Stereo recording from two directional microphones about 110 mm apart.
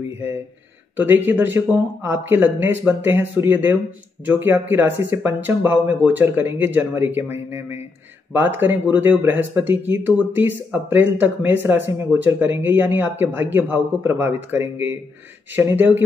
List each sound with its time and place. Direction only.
0.9 s speech: 15° right (ahead or behind)